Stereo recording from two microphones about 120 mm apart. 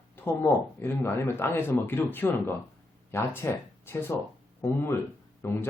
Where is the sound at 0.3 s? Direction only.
15° left (ahead or behind).